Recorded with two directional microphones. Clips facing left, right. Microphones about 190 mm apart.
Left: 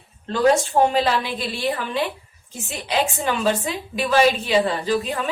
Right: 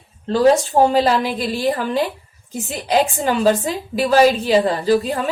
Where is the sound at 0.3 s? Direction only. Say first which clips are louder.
Right 4 dB; 35° right (ahead or behind).